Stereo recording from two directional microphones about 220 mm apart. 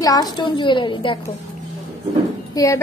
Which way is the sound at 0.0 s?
15° left (ahead or behind).